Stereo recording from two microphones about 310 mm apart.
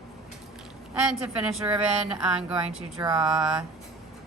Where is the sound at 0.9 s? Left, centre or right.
Centre.